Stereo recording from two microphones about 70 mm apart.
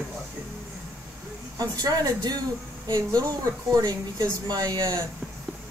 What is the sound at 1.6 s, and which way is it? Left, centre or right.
A woman's voice, right.